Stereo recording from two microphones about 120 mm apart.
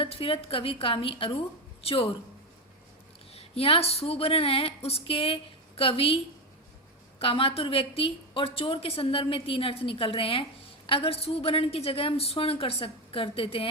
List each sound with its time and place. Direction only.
0.0 s a woman's voice: 50° left (ahead or behind)
3.3 s a woman's voice: 55° left (ahead or behind)
7.2 s a woman's voice: 50° left (ahead or behind)